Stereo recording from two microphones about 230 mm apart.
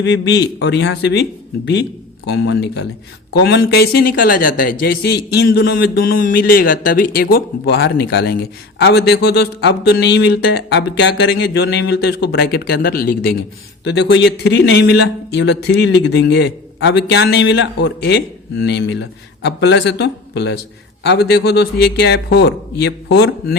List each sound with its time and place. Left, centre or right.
0.0 s a man's voice: left
18.6 s a man's voice: left